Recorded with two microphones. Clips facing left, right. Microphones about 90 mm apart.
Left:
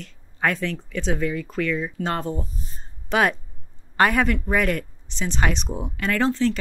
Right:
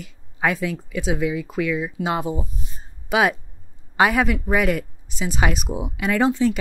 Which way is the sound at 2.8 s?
5° right (ahead or behind).